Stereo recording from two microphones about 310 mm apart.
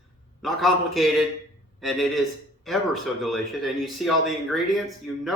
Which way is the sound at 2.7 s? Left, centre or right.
Centre.